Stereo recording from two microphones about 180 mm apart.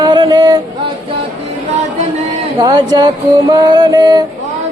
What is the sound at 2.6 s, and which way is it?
Music, 20° right (ahead or behind).